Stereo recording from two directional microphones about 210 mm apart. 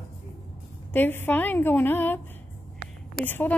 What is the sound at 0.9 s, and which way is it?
A woman's voice, 10° left (ahead or behind).